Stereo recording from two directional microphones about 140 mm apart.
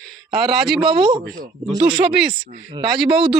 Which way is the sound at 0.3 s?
Centre (ahead or behind).